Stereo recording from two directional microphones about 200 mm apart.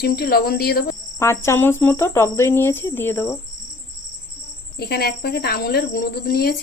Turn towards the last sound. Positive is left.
turn(degrees=50)  # may be behind; listen again after turning